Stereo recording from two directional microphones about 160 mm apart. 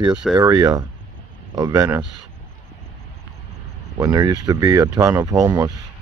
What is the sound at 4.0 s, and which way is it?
Speech, 25° right (ahead or behind).